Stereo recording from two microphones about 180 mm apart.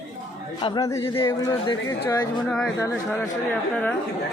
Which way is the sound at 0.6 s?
20° left (ahead or behind).